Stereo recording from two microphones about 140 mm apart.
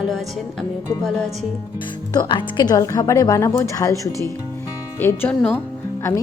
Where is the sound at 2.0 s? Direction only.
30° left (ahead or behind).